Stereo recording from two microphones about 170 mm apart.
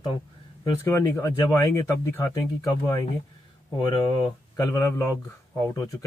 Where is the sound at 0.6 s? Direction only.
15° left (ahead or behind).